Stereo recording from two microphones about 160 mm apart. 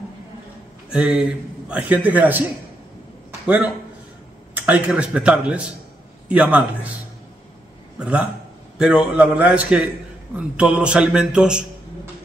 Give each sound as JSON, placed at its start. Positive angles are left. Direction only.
{"t": 0.8, "sound": "a man's voice", "side_deg": -5}
{"t": 3.4, "sound": "a man's voice", "side_deg": -10}
{"t": 8.0, "sound": "a man's voice", "side_deg": -5}